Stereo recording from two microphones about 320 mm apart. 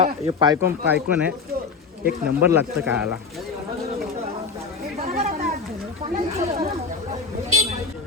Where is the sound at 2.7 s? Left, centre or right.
Centre.